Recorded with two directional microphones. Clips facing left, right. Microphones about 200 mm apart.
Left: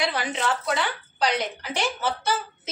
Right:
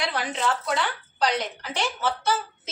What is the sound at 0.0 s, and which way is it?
A woman's voice, 5° left (ahead or behind).